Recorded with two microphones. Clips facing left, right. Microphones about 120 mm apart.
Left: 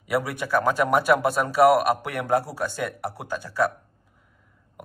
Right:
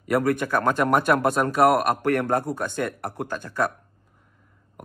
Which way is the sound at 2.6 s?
50° right (ahead or behind).